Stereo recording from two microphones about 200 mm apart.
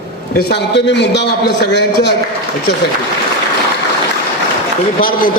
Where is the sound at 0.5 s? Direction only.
60° left (ahead or behind).